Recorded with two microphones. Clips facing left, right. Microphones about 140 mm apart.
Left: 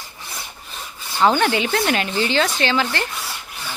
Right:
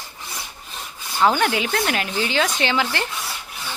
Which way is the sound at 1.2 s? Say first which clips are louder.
Left 2 dB; centre (ahead or behind).